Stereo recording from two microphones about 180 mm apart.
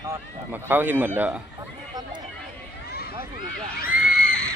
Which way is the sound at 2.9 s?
60° left (ahead or behind).